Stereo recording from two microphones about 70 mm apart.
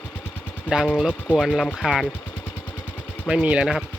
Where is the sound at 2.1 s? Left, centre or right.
Left.